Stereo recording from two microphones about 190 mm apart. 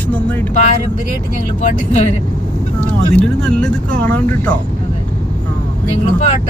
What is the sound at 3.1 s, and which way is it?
Speech, 5° left (ahead or behind).